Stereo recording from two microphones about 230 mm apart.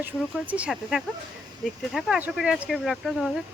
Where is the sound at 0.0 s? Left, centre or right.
Centre.